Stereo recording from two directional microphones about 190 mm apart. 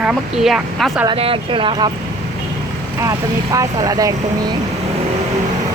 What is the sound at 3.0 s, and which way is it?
Speech, 15° right (ahead or behind).